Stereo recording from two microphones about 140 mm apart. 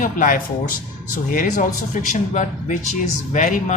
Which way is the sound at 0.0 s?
75° left (ahead or behind).